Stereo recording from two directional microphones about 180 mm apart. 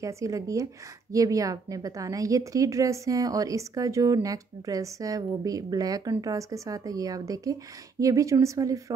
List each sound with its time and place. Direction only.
0.0 s a woman's voice: 15° right (ahead or behind)